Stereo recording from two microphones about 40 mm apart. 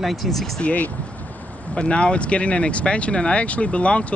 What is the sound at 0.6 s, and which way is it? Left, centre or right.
Speech, left.